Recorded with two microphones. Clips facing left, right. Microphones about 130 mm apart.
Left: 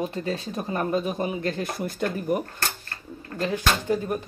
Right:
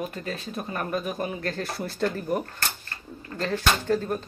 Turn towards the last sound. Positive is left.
turn(degrees=15)  # may be behind; listen again after turning